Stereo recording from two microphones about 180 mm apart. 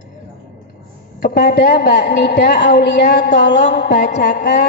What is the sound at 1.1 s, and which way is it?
A man's voice, 70° left (ahead or behind).